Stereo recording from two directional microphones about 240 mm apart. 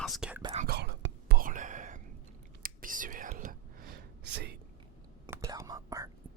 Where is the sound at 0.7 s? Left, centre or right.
Right.